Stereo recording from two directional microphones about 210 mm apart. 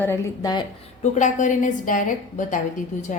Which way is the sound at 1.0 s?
35° left (ahead or behind).